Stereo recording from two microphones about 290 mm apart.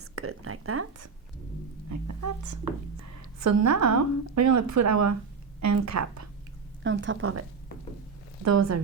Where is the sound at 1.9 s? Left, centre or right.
Right.